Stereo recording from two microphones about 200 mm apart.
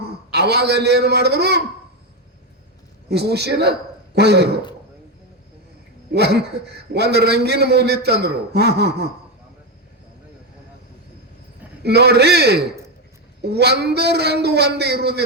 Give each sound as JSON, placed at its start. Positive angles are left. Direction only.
{"t": 0.0, "sound": "a man's voice", "side_deg": -55}
{"t": 3.1, "sound": "a man's voice", "side_deg": -55}
{"t": 6.1, "sound": "a man's voice", "side_deg": -55}
{"t": 11.8, "sound": "a man's voice", "side_deg": -55}